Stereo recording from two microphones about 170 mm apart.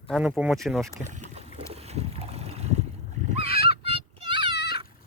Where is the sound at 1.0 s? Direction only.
45° right (ahead or behind).